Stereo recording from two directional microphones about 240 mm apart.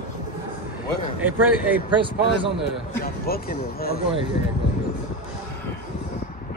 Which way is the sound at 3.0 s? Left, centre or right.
Left.